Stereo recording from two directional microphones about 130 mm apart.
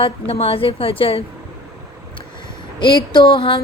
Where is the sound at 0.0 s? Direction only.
45° left (ahead or behind).